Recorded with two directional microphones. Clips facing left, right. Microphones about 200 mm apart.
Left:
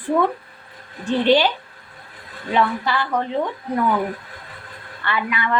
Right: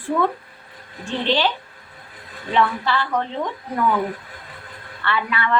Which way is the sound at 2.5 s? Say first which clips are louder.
Even; 15° left (ahead or behind).